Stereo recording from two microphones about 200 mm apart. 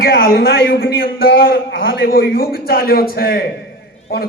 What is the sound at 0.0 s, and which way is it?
A man's voice, 50° left (ahead or behind).